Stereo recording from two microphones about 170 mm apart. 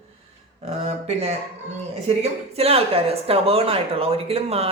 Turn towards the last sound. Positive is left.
turn(degrees=-35)  # may be behind; listen again after turning